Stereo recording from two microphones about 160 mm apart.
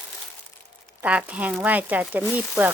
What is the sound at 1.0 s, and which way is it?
A woman's voice, 10° right (ahead or behind).